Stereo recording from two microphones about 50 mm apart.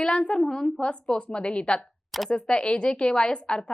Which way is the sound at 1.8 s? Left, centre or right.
Centre.